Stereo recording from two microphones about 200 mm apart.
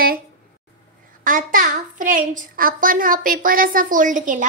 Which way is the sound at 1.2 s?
45° right (ahead or behind).